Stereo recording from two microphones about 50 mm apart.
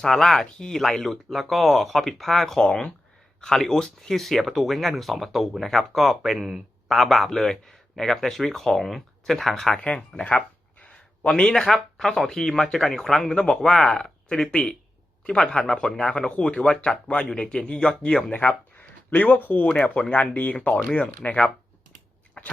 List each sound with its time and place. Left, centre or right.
0.0 s speech: centre
2.6 s speech: centre
10.2 s a sound: left
11.3 s speech: centre
18.8 s speech: left
22.4 s biting: left